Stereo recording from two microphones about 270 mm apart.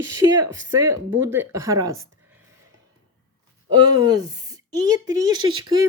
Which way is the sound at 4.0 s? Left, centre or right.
Centre.